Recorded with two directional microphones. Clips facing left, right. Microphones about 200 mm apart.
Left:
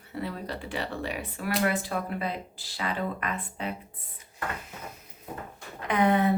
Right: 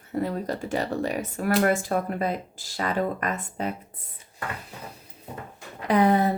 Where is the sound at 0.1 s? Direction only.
45° right (ahead or behind).